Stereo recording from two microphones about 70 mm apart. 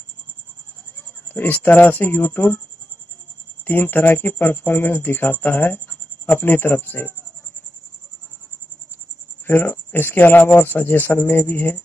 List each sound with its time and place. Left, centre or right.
1.3 s speech: left
3.6 s speech: left
9.5 s speech: left